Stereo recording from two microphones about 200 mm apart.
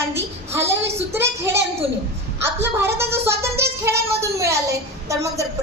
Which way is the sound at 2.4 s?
10° right (ahead or behind).